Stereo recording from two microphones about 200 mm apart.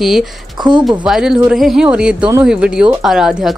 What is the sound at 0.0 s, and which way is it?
Speech, centre (ahead or behind).